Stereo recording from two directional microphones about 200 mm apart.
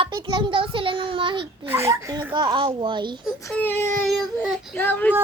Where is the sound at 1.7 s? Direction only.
15° right (ahead or behind).